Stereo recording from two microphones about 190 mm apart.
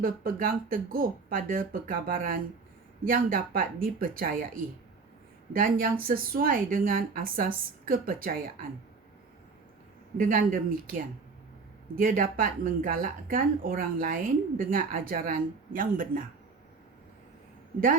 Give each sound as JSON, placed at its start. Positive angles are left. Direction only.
{"t": 0.0, "sound": "a woman's voice", "side_deg": -50}
{"t": 10.2, "sound": "a woman's voice", "side_deg": -45}